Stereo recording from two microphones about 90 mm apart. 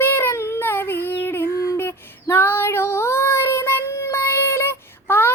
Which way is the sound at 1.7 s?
25° left (ahead or behind).